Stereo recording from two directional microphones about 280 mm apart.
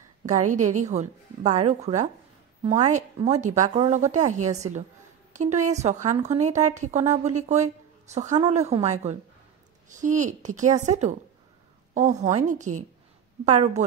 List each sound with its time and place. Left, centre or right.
0.5 s a woman's voice: right